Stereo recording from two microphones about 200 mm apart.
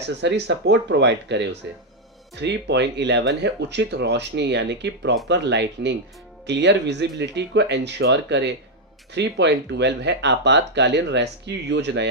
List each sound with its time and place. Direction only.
0.2 s speech: 60° right (ahead or behind)